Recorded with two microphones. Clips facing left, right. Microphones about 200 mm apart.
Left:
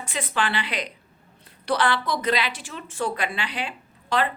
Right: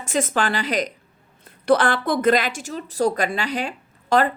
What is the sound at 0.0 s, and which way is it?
A woman's voice, 45° right (ahead or behind).